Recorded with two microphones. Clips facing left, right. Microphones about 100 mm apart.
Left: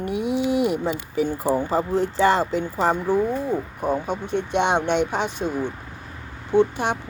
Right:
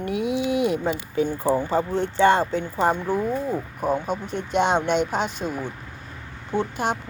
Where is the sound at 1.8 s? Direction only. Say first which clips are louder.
Left 2 dB; 90° left.